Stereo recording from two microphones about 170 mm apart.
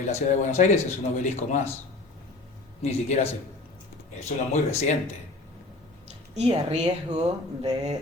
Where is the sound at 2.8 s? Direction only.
40° left (ahead or behind).